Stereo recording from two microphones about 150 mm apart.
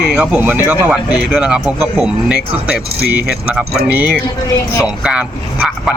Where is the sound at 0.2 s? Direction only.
10° right (ahead or behind).